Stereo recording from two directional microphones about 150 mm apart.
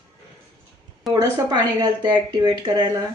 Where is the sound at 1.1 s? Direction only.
30° right (ahead or behind).